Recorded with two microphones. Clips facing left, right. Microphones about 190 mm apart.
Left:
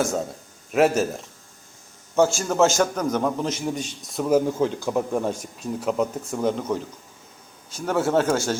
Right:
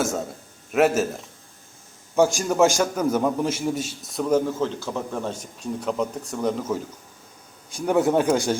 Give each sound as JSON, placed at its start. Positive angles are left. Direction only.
{"t": 0.7, "sound": "a man's voice", "side_deg": 0}
{"t": 2.1, "sound": "a man's voice", "side_deg": -10}
{"t": 7.7, "sound": "speech", "side_deg": -15}